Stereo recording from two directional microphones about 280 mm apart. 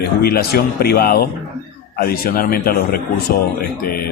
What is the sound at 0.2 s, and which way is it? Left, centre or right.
Speech, left.